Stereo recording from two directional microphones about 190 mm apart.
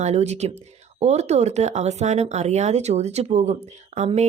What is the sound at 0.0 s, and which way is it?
Speech, 35° right (ahead or behind).